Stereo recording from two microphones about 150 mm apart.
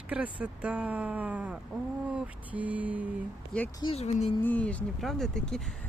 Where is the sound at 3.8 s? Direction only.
45° left (ahead or behind).